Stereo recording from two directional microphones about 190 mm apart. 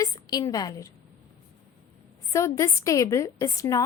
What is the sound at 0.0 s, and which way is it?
Speech, 20° left (ahead or behind).